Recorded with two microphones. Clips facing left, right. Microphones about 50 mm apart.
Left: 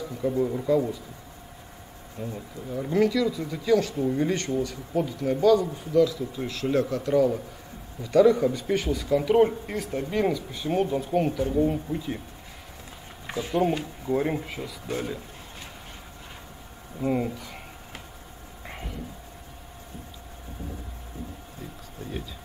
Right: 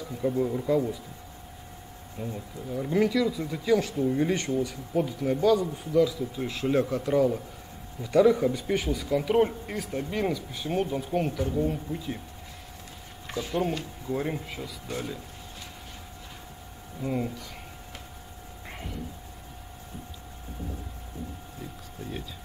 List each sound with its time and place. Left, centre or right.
0.2 s speech: centre
2.1 s speech: centre
13.3 s speech: centre
17.0 s speech: centre